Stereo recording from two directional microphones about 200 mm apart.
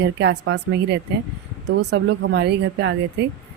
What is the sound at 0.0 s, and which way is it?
Speech, 60° right (ahead or behind).